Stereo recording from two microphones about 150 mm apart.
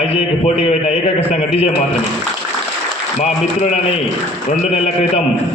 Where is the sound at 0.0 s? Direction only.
45° left (ahead or behind).